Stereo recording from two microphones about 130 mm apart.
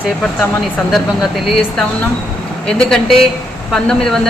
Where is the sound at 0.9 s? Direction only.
Centre (ahead or behind).